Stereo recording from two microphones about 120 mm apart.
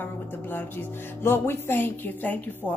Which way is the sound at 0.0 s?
15° left (ahead or behind).